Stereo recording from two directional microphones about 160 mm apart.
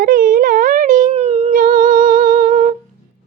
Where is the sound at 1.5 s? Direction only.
60° right (ahead or behind).